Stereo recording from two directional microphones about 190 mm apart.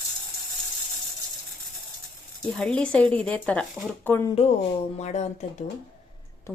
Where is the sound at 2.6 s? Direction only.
5° left (ahead or behind).